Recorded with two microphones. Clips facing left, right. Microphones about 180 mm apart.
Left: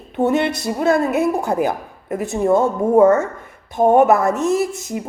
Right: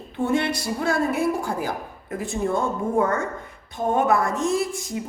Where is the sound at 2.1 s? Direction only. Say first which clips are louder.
Left 6 dB; 70° left (ahead or behind).